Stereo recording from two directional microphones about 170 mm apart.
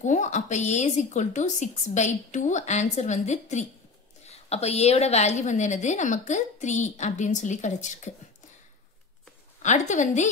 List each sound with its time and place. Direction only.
0.0 s a woman's voice: 45° left (ahead or behind)
9.6 s a woman's voice: 45° left (ahead or behind)